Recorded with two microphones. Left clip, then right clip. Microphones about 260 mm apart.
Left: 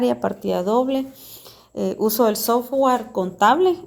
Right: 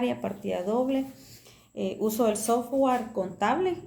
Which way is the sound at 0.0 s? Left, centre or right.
Left.